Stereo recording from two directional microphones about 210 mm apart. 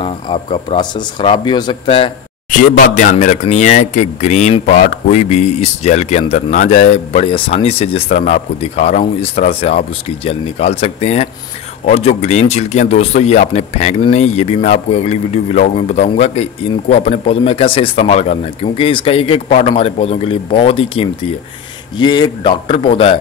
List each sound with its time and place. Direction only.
0.0 s a man's voice: 25° left (ahead or behind)
2.5 s a man's voice: 40° left (ahead or behind)